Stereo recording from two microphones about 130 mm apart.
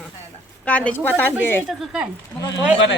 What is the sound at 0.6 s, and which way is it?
Speech, 10° left (ahead or behind).